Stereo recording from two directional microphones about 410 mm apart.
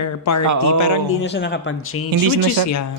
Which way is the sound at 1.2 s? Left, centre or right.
Left.